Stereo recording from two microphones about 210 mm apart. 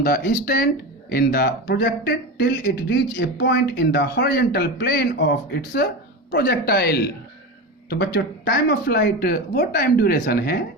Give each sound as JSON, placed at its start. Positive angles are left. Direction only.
{"t": 0.0, "sound": "speech", "side_deg": 45}